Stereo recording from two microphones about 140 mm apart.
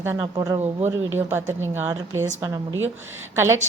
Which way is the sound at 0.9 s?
15° right (ahead or behind).